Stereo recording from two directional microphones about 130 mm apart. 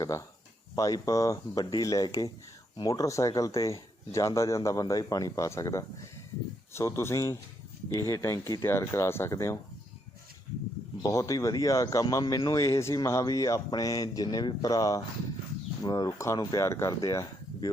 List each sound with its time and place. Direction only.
0.0 s speech: 25° left (ahead or behind)
11.0 s speech: 25° left (ahead or behind)